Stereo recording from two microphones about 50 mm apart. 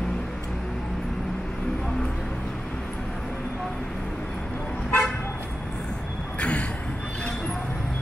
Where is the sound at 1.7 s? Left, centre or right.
Centre.